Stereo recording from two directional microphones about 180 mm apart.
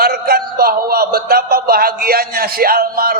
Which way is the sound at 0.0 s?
55° right (ahead or behind).